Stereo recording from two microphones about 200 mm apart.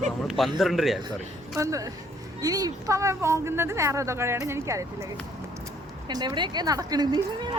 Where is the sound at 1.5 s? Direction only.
15° right (ahead or behind).